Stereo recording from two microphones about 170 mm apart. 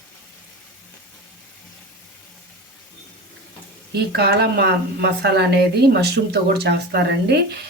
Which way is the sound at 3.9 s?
75° right (ahead or behind).